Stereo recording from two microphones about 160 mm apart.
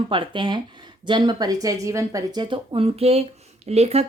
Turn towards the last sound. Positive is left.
turn(degrees=-40)  # may be behind; listen again after turning